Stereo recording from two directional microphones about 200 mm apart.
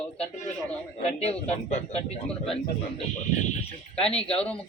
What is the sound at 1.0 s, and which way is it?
A man's voice, 30° left (ahead or behind).